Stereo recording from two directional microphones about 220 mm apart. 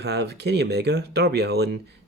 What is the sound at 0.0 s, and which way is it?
Speech, 50° right (ahead or behind).